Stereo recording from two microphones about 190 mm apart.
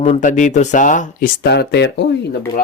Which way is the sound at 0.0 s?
40° left (ahead or behind).